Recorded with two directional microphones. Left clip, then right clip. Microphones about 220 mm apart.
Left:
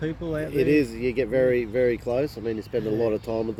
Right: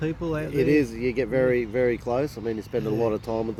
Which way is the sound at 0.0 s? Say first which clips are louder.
Right 1 dB; 40° right (ahead or behind).